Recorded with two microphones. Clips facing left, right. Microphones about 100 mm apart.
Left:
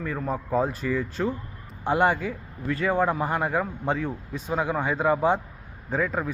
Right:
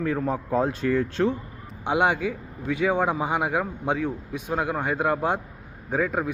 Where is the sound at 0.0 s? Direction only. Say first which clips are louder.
Right 4 dB; centre (ahead or behind).